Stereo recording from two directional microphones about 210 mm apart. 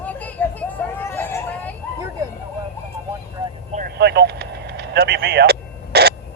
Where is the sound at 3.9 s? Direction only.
50° right (ahead or behind).